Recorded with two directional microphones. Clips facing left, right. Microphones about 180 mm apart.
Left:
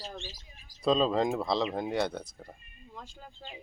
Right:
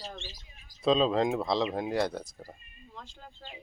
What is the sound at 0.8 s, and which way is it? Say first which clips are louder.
Speech: right 1 dB; centre (ahead or behind).